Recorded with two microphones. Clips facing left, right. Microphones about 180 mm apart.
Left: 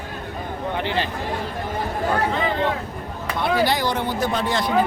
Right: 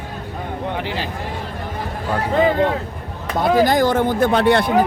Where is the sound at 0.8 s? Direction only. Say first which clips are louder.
Left 1 dB; 5° right (ahead or behind).